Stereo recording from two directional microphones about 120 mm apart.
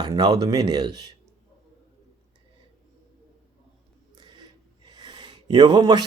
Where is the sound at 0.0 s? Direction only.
35° right (ahead or behind).